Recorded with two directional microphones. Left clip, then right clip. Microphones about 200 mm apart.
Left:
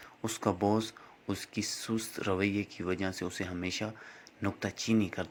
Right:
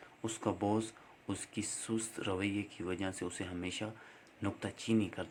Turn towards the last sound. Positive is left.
turn(degrees=15)  # may be behind; listen again after turning